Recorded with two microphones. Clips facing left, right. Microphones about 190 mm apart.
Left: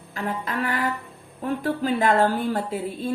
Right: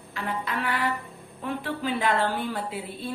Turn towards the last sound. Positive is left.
turn(degrees=45)  # may be behind; listen again after turning